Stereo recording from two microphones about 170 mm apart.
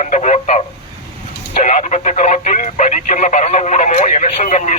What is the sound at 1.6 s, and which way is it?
Speech, 45° left (ahead or behind).